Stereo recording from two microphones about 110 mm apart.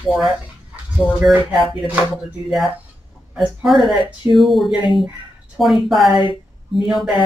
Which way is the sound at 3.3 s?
5° right (ahead or behind).